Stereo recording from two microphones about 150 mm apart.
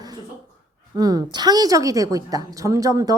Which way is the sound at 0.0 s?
30° right (ahead or behind).